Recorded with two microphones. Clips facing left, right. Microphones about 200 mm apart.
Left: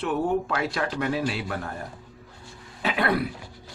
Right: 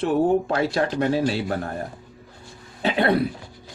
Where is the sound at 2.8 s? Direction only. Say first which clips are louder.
Right 5 dB; 25° right (ahead or behind).